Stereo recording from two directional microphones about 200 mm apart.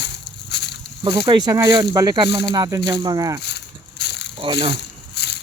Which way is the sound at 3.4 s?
55° left (ahead or behind).